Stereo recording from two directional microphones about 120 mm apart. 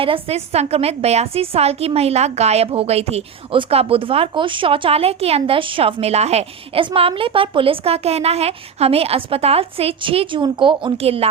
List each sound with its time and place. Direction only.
0.0 s a woman's voice: 55° right (ahead or behind)
6.8 s a woman's voice: 45° right (ahead or behind)